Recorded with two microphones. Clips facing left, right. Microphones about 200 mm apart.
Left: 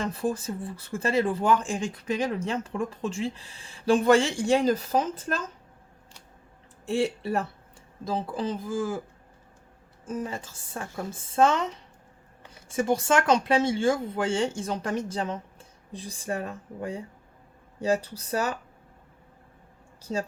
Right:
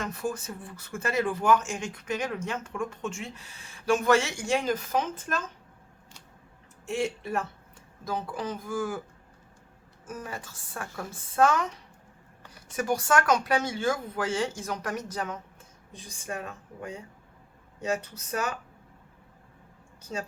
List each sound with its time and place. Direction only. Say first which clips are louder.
0.0 s speech: left 4 dB; 30° left (ahead or behind)
6.8 s speech: left 4 dB; 35° left (ahead or behind)
10.1 s speech: left 6 dB; 25° left (ahead or behind)
12.7 s speech: left 2 dB; 25° left (ahead or behind)
20.0 s speech: left 5 dB; 35° left (ahead or behind)